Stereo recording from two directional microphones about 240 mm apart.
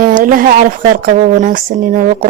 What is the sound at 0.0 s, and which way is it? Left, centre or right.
Speech, right.